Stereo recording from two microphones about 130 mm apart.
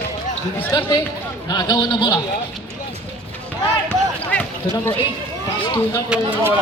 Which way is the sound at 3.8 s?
10° left (ahead or behind).